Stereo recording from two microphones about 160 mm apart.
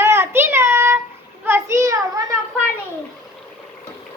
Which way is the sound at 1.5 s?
15° right (ahead or behind).